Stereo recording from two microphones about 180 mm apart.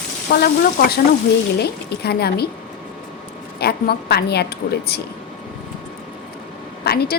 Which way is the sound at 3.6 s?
65° left (ahead or behind).